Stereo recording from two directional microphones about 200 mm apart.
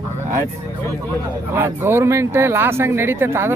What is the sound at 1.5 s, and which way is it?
Speech, 10° right (ahead or behind).